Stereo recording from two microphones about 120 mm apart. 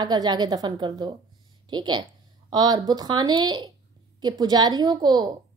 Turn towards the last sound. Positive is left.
turn(degrees=-35)  # may be behind; listen again after turning